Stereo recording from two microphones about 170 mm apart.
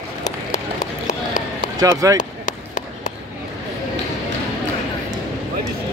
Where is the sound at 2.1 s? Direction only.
45° left (ahead or behind).